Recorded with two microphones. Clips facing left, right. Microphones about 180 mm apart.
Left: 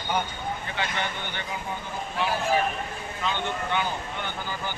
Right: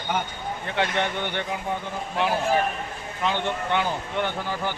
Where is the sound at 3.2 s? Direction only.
65° right (ahead or behind).